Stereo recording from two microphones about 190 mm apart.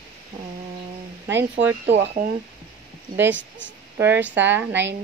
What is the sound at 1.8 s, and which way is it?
Speech, 70° right (ahead or behind).